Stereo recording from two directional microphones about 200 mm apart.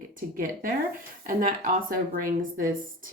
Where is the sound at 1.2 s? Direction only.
45° right (ahead or behind).